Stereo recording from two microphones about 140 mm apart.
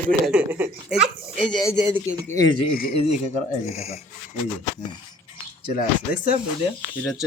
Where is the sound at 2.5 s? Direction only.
40° left (ahead or behind).